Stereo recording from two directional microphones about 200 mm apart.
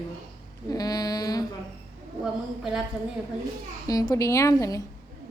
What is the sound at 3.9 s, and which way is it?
Speech, 15° left (ahead or behind).